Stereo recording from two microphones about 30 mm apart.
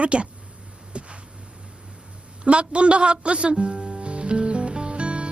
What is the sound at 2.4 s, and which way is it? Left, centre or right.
Speech, right.